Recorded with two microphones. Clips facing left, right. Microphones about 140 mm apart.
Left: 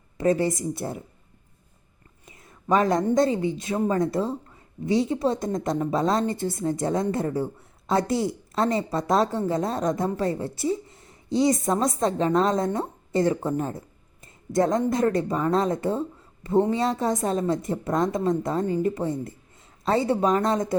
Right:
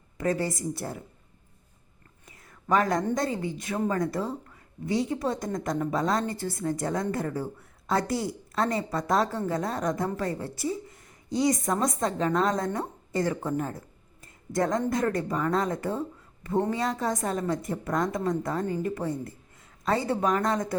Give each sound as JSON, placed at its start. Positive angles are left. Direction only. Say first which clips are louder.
{"t": 0.2, "sound": "a woman's voice", "louder": "left 5 dB", "side_deg": 20}
{"t": 2.3, "sound": "a woman's voice", "louder": "left 2 dB", "side_deg": 20}